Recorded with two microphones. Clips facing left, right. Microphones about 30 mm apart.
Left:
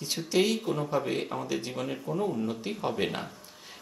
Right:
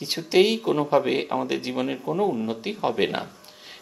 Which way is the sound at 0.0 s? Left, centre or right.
Right.